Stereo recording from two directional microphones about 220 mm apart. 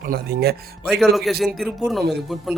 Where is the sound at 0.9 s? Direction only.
Centre (ahead or behind).